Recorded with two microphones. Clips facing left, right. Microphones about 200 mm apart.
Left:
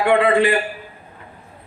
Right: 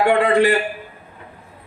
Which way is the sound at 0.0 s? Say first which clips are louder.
Even; 40° right (ahead or behind).